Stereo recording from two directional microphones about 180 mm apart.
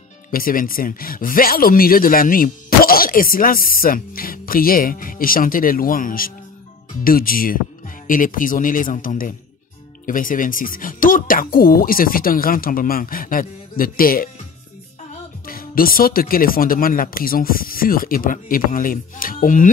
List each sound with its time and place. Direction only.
0.3 s speech: 50° left (ahead or behind)
15.4 s speech: 55° left (ahead or behind)